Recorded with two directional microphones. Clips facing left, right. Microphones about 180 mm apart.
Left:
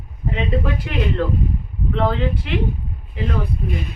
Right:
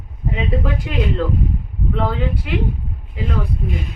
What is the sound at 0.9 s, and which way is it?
A woman's voice, 15° right (ahead or behind).